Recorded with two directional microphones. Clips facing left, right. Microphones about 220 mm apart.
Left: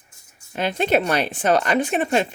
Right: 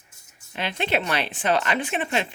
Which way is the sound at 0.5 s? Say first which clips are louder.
Left 6 dB; 45° left (ahead or behind).